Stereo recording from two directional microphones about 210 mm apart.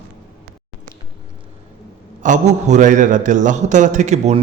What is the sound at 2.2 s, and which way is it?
A man's voice, 35° right (ahead or behind).